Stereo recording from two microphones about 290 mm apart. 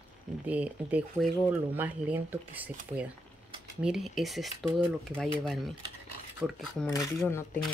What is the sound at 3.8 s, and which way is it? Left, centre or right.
Speech, centre.